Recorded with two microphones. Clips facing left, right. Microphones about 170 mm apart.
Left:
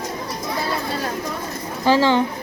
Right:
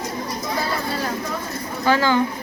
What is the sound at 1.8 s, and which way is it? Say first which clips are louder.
Speech: left 3 dB; 30° left (ahead or behind).